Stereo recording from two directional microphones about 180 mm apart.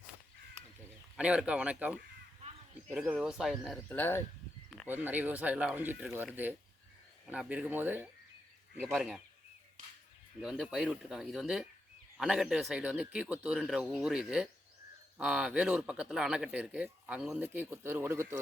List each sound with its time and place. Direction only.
1.1 s speech: 5° right (ahead or behind); by 4.2 s 10° left (ahead or behind)
4.9 s speech: 10° right (ahead or behind)
7.3 s speech: 5° right (ahead or behind)
9.8 s a sound: 50° right (ahead or behind)
10.4 s speech: centre (ahead or behind)